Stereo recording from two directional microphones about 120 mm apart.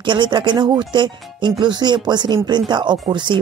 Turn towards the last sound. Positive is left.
turn(degrees=-40)  # may be behind; listen again after turning